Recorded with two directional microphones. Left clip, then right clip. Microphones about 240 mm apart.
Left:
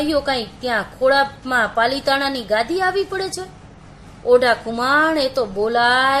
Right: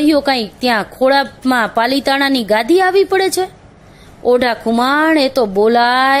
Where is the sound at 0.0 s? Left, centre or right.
Right.